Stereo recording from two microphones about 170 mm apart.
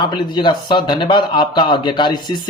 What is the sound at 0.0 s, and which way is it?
A man's voice, 25° left (ahead or behind).